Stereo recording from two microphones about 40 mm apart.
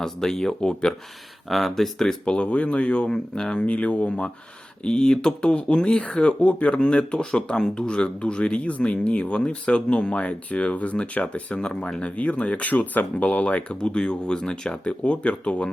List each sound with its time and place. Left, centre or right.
0.0 s speech: centre
1.5 s speech: centre
2.2 s speech: left
4.8 s speech: centre; by 6.7 s left
6.7 s speech: left
12.0 s speech: left